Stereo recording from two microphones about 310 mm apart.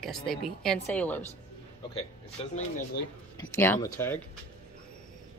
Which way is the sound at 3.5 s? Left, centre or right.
Centre.